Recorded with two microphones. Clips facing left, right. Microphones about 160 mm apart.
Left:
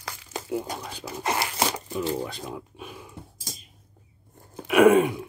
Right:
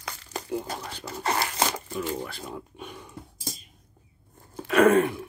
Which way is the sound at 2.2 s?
15° left (ahead or behind).